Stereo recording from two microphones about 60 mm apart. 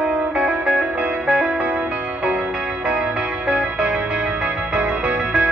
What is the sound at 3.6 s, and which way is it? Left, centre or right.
Music, centre.